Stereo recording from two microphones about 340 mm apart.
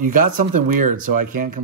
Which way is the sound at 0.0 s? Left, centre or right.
Right.